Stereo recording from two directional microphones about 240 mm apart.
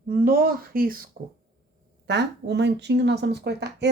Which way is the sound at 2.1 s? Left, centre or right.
Right.